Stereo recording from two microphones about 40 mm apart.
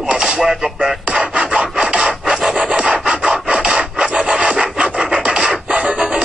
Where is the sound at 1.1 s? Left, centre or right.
Right.